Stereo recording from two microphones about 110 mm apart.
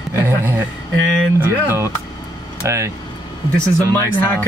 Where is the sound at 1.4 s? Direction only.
20° right (ahead or behind).